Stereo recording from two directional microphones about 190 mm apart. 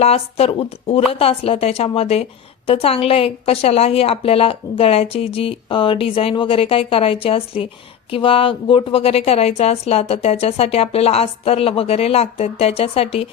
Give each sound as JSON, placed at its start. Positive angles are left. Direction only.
{"t": 0.0, "sound": "a woman's voice", "side_deg": 30}